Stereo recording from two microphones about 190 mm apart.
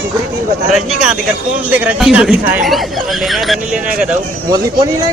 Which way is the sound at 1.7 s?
5° right (ahead or behind).